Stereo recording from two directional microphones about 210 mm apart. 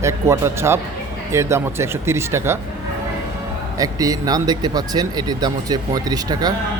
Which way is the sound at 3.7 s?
15° right (ahead or behind).